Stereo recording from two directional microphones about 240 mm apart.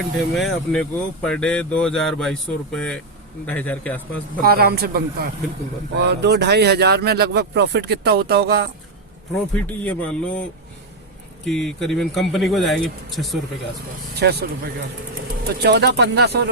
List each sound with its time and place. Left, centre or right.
0.3 s a man's voice: centre
4.4 s speech: right
9.6 s speech: centre
11.4 s speech: centre
14.2 s speech: right